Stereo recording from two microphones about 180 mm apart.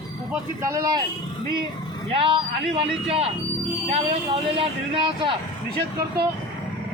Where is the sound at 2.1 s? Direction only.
30° right (ahead or behind).